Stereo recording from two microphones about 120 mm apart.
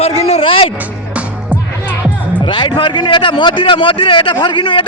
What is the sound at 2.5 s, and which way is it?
Speech, 40° left (ahead or behind).